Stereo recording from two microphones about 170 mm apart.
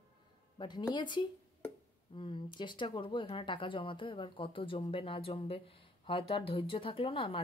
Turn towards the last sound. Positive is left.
turn(degrees=30)  # may be behind; listen again after turning